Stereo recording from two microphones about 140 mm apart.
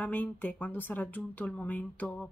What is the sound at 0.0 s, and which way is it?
Speech, 10° left (ahead or behind).